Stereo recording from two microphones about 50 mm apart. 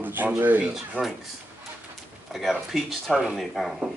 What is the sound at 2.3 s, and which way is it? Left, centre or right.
Speech, centre.